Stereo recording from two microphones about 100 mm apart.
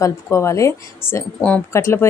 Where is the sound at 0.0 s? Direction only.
30° left (ahead or behind).